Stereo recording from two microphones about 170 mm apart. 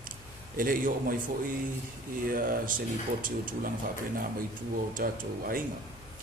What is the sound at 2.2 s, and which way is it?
Speech, 55° right (ahead or behind).